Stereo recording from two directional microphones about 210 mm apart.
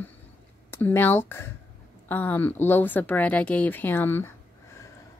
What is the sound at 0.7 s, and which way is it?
Speech, 10° left (ahead or behind).